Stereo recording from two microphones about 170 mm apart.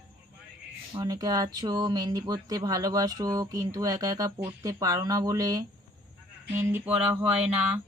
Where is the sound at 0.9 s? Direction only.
20° right (ahead or behind).